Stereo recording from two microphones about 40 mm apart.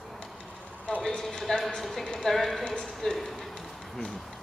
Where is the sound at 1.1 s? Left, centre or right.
Centre.